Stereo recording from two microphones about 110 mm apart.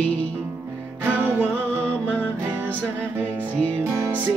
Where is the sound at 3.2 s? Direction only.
15° right (ahead or behind).